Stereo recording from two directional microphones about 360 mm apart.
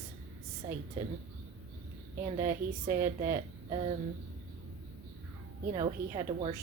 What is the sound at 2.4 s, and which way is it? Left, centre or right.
Speech, centre.